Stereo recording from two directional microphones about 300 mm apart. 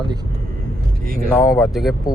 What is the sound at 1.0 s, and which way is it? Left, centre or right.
Speech, right.